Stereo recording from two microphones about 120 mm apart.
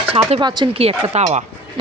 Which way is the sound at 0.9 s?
50° right (ahead or behind).